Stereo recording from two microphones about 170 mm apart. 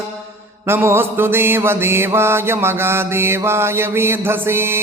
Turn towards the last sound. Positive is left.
turn(degrees=-15)  # may be behind; listen again after turning